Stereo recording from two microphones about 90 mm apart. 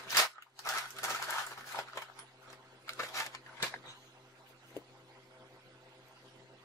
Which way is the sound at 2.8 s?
35° left (ahead or behind).